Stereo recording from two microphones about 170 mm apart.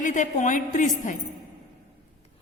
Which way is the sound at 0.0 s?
50° left (ahead or behind).